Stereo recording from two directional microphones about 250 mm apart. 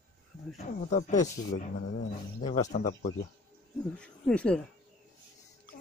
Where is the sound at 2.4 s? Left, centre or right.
Left.